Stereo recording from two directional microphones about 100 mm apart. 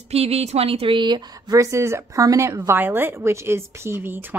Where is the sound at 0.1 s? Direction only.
90° right; by 1.6 s 45° right (ahead or behind).